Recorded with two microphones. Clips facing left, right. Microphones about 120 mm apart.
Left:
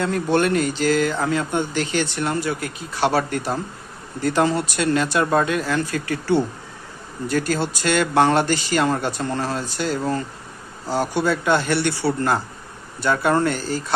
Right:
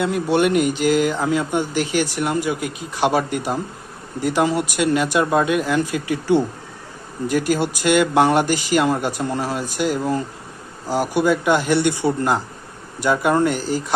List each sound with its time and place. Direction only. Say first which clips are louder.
0.0 s speech: right 2 dB; 10° right (ahead or behind)